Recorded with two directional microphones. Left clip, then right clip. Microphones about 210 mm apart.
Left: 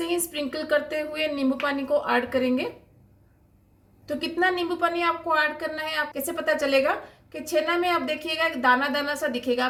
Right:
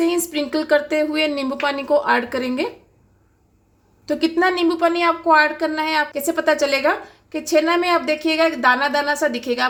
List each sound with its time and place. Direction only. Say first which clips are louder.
0.0 s a woman's voice: right 7 dB; 40° right (ahead or behind)
4.0 s a woman's voice: right 6 dB; 45° right (ahead or behind)